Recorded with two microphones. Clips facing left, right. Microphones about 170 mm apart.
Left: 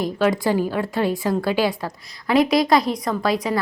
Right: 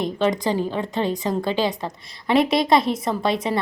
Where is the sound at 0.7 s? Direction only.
20° right (ahead or behind).